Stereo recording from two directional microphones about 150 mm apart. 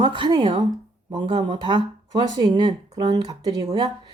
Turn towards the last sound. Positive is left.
turn(degrees=-30)  # may be behind; listen again after turning